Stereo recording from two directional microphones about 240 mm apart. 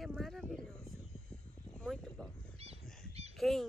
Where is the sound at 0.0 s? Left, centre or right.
Centre.